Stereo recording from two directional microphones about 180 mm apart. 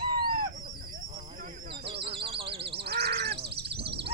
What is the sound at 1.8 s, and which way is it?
Bird, 30° right (ahead or behind).